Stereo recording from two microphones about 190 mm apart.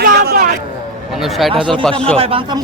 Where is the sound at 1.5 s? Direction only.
25° right (ahead or behind).